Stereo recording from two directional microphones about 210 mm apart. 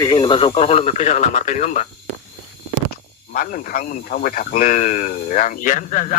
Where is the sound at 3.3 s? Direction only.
40° left (ahead or behind).